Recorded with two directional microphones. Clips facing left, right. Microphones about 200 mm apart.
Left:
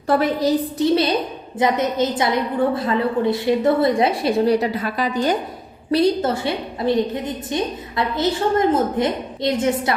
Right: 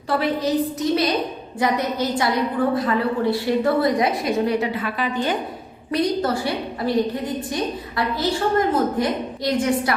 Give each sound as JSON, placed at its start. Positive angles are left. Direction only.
{"t": 0.2, "sound": "a woman's voice", "side_deg": 35}
{"t": 5.9, "sound": "a woman's voice", "side_deg": 25}